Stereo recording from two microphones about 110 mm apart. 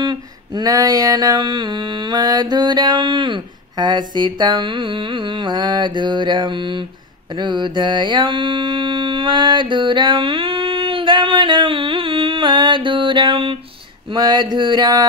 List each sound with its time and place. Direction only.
0.0 s mantra: 40° right (ahead or behind)
14.1 s mantra: 40° right (ahead or behind)